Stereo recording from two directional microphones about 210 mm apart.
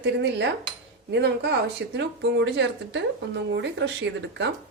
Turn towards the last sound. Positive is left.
turn(degrees=-60)  # may be behind; listen again after turning